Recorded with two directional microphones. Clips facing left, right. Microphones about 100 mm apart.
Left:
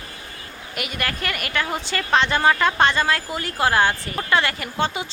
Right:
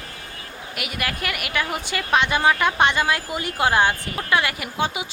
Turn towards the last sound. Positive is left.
turn(degrees=-10)  # may be behind; listen again after turning